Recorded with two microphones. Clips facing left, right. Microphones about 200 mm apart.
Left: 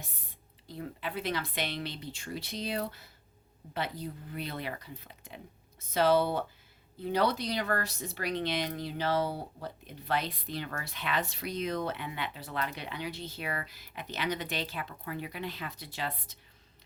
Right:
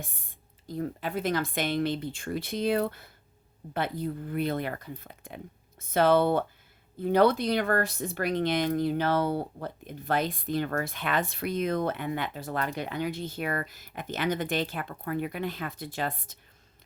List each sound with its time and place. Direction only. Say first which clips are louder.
0.0 s speech: right 6 dB; 50° right (ahead or behind)